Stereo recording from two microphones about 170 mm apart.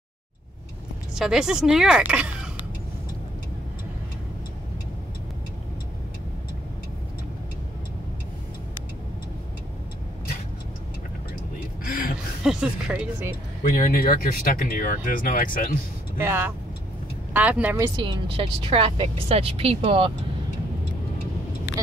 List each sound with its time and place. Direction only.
1.1 s speech: 5° right (ahead or behind)
12.4 s music: 5° right (ahead or behind)
13.7 s speech: 60° left (ahead or behind)
16.2 s speech: 15° right (ahead or behind)
17.9 s speech: 30° right (ahead or behind)